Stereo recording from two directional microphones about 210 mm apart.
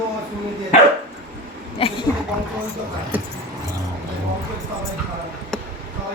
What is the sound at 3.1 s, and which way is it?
Keys jangling, 10° right (ahead or behind).